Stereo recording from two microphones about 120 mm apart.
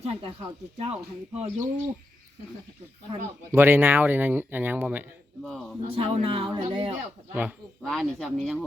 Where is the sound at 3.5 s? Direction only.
20° right (ahead or behind).